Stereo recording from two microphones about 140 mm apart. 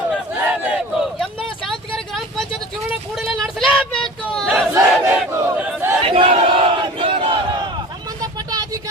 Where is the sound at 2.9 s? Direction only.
Centre (ahead or behind).